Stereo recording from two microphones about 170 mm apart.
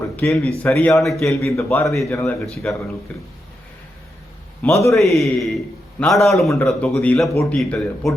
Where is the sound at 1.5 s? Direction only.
15° left (ahead or behind).